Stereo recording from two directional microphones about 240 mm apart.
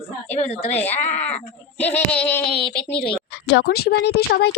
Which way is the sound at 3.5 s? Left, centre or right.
Left.